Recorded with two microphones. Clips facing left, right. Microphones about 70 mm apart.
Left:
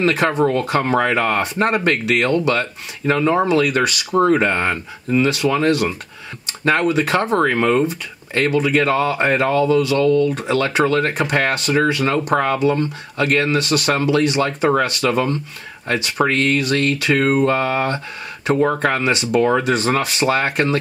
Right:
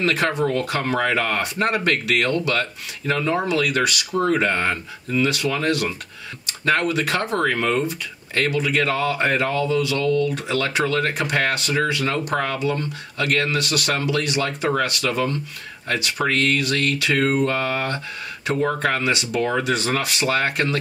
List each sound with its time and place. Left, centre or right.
0.0 s speech: left